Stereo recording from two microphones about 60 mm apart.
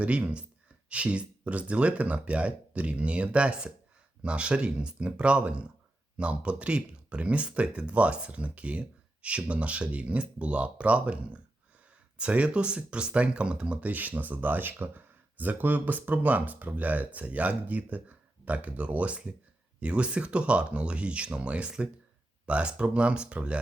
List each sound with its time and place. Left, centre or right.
0.0 s speech: right